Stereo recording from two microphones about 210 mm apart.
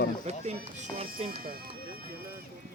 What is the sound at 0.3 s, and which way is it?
Speech, 30° right (ahead or behind).